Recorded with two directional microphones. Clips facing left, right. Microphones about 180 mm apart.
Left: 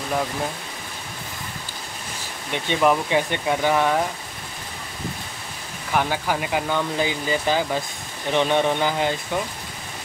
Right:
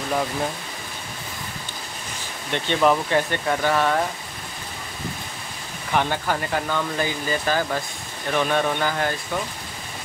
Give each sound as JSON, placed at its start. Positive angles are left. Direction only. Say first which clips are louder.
{"t": 2.5, "sound": "speech", "louder": "even", "side_deg": 10}
{"t": 5.9, "sound": "speech", "louder": "even", "side_deg": 5}